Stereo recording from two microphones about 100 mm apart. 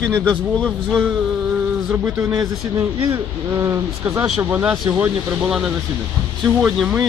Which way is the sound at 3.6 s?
30° right (ahead or behind).